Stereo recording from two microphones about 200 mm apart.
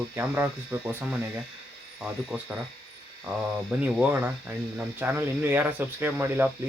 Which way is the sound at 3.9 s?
5° right (ahead or behind).